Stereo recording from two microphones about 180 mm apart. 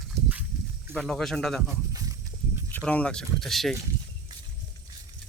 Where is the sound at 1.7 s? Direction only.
20° right (ahead or behind).